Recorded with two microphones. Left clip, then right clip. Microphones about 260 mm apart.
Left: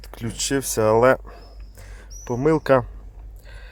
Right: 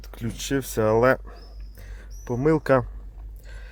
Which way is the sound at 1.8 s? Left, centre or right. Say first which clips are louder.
Left 6 dB; left.